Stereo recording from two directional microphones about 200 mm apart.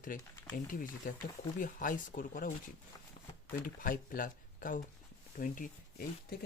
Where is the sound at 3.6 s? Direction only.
45° left (ahead or behind).